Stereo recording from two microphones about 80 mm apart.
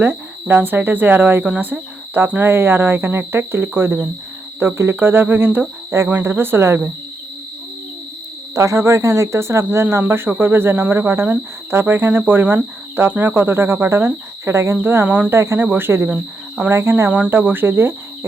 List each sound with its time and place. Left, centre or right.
0.0 s speech: right
1.5 s speech: centre
2.1 s speech: right
8.5 s speech: right
15.0 s speech: centre
15.3 s speech: right